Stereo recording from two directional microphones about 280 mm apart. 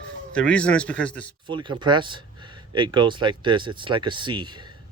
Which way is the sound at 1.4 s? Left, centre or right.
Centre.